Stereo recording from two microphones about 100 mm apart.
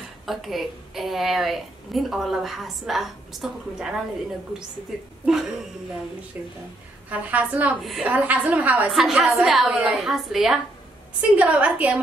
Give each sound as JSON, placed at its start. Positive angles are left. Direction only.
{"t": 0.3, "sound": "a woman's voice", "side_deg": 0}
{"t": 5.2, "sound": "speech", "side_deg": -5}
{"t": 7.1, "sound": "a woman's voice", "side_deg": -15}
{"t": 7.8, "sound": "a woman's voice", "side_deg": 0}
{"t": 8.1, "sound": "a woman's voice", "side_deg": -15}
{"t": 8.9, "sound": "a woman's voice", "side_deg": -5}
{"t": 11.1, "sound": "a woman's voice", "side_deg": -15}